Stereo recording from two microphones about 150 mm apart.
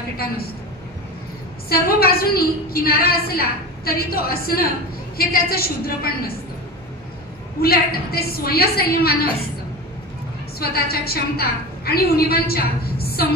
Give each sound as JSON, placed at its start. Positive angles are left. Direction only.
{"t": 1.7, "sound": "a woman's voice", "side_deg": 90}
{"t": 7.6, "sound": "a woman's voice", "side_deg": 90}
{"t": 10.6, "sound": "a woman's voice", "side_deg": 90}